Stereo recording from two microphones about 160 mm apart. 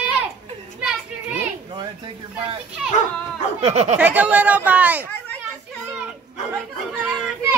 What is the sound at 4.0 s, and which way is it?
Speech, 10° right (ahead or behind).